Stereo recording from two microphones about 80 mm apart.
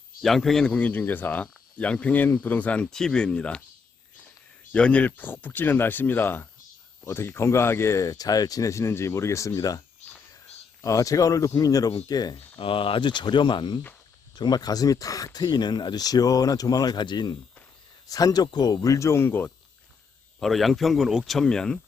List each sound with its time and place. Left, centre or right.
0.2 s speech: centre
2.8 s speech: centre
4.7 s speech: centre; by 9.8 s left
10.8 s speech: left
12.6 s speech: left
14.3 s speech: left
18.1 s speech: left
18.4 s speech: left
20.4 s speech: centre